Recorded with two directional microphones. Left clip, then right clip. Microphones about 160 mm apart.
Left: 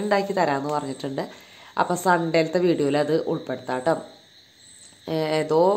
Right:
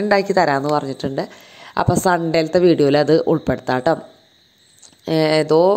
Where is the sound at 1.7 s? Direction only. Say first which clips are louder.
Right 4 dB; 40° right (ahead or behind).